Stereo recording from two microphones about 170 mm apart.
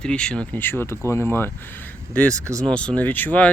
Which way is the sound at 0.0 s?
5° left (ahead or behind).